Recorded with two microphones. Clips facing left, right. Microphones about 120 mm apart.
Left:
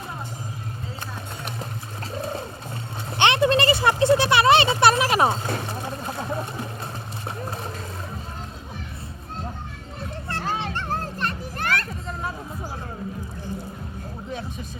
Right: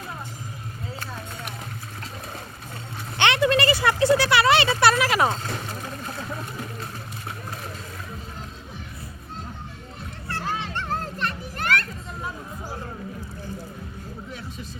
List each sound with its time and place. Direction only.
3.2 s a sound: 20° left (ahead or behind)
7.3 s vehicle: 30° left (ahead or behind)
10.9 s children playing: 40° left (ahead or behind)